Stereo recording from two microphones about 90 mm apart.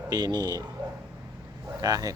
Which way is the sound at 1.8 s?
45° right (ahead or behind).